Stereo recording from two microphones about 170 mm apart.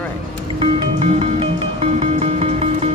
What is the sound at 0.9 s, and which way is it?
Music, 35° right (ahead or behind).